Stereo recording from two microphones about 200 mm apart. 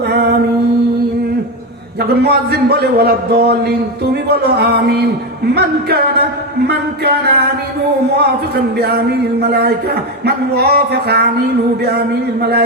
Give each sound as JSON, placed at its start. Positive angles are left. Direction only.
{"t": 0.1, "sound": "mantra", "side_deg": -55}
{"t": 2.0, "sound": "a man's voice", "side_deg": -55}